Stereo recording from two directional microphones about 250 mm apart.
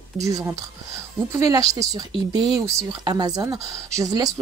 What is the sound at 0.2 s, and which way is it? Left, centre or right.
Speech, centre.